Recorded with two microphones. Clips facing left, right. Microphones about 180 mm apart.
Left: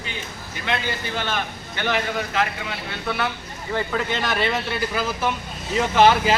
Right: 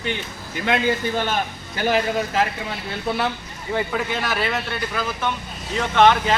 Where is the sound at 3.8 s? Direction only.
10° right (ahead or behind).